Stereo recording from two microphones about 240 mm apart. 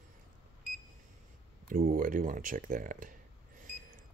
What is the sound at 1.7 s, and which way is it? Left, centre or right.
Speech, right.